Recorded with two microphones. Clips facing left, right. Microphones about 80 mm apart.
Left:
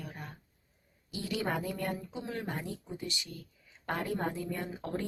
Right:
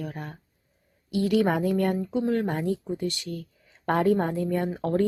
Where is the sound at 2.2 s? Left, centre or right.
Right.